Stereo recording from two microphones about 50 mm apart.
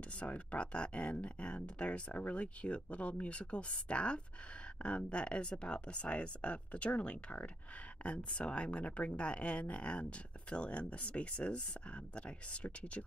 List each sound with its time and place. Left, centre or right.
0.2 s speech: left